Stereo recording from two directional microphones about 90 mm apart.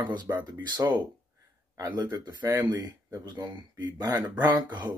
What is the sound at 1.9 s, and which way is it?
Speech, 50° right (ahead or behind).